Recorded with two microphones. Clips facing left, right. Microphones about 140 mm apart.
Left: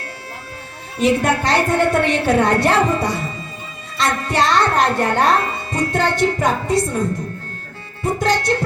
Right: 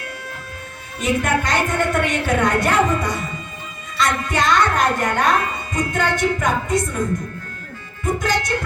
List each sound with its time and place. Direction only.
0.9 s speech: 30° left (ahead or behind)
8.0 s music: 30° left (ahead or behind)